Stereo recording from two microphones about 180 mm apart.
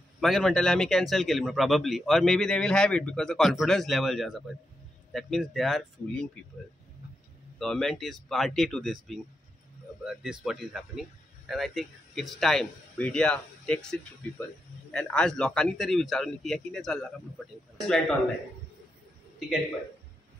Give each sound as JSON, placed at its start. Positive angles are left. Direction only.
{"t": 0.2, "sound": "a man's voice", "side_deg": 0}
{"t": 7.5, "sound": "a man's voice", "side_deg": 5}